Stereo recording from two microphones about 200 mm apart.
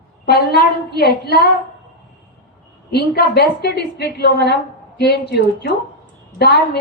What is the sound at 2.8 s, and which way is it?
A woman's voice, 55° left (ahead or behind).